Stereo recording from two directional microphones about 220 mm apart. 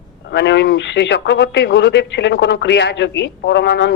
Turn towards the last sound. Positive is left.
turn(degrees=55)  # may be behind; listen again after turning